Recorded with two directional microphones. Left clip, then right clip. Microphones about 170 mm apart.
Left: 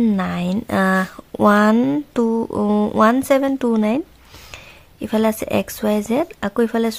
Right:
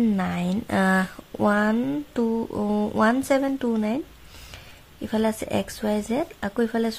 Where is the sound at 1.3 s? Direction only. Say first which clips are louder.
Left 8 dB; 40° left (ahead or behind).